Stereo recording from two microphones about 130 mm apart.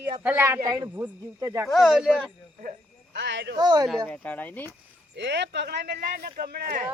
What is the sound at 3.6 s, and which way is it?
Speech, 35° right (ahead or behind).